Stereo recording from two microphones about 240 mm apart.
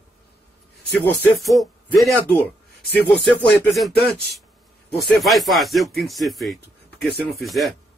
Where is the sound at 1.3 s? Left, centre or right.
Centre.